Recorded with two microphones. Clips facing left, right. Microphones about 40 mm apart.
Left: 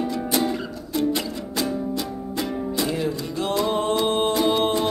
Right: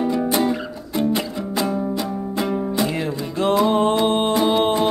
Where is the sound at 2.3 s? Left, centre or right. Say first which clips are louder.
Right 4 dB; centre.